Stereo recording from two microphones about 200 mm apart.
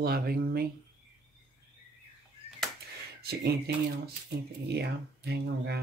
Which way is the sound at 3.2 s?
55° right (ahead or behind).